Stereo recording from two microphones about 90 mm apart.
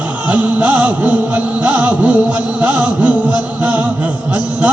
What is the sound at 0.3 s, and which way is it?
Music, 15° right (ahead or behind).